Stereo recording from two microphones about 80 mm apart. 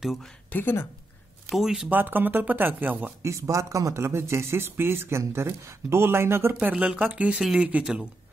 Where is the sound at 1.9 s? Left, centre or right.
Right.